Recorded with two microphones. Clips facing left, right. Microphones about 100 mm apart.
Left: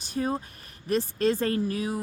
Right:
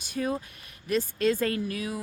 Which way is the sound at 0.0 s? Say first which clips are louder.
Left 1 dB; 35° left (ahead or behind).